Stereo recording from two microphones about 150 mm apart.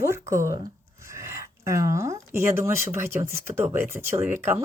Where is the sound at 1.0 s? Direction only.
20° right (ahead or behind).